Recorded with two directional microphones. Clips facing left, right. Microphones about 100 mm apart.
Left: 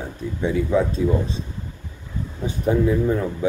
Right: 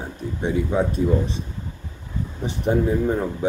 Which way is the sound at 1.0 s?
40° right (ahead or behind).